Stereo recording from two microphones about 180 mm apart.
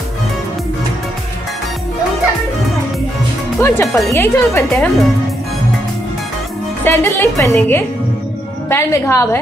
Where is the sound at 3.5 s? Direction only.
15° left (ahead or behind).